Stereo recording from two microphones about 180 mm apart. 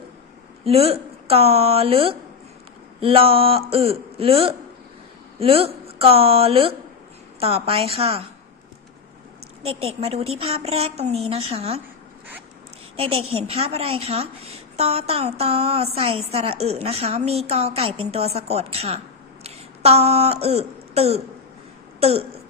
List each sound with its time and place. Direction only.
0.6 s a woman's voice: 35° right (ahead or behind)
9.6 s a woman's voice: 35° right (ahead or behind)
13.0 s a woman's voice: 30° right (ahead or behind)